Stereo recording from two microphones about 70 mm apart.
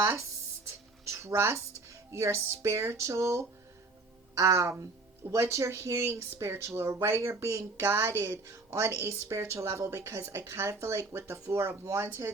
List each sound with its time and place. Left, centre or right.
1.1 s speech: right